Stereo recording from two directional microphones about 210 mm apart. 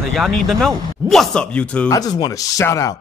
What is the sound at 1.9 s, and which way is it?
Speech, 15° left (ahead or behind).